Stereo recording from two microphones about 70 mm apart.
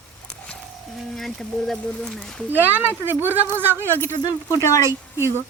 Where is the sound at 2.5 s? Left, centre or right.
Right.